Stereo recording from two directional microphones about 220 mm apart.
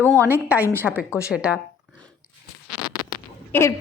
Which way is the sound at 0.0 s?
10° right (ahead or behind).